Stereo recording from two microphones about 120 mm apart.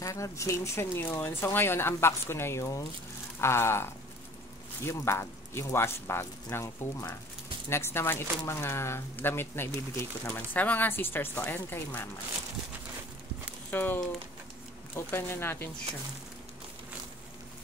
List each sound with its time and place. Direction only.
0.0 s speech: 25° left (ahead or behind)
13.7 s speech: 15° left (ahead or behind)